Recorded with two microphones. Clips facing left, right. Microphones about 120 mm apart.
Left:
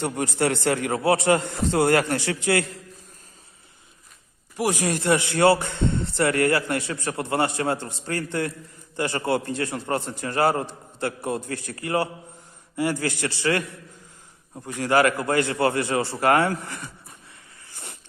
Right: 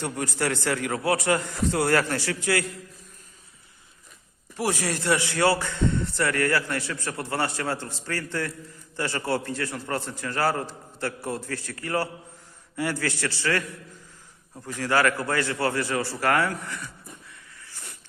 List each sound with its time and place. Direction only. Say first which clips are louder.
0.0 s a man's voice: left 4 dB; 25° left (ahead or behind)
4.5 s a man's voice: left 3 dB; 15° left (ahead or behind)
16.6 s speech: even; 60° left (ahead or behind)